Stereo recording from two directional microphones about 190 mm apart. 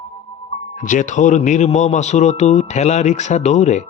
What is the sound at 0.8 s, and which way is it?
Speech, 40° left (ahead or behind).